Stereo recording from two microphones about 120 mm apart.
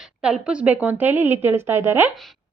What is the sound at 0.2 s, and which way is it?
A woman's voice, 10° right (ahead or behind).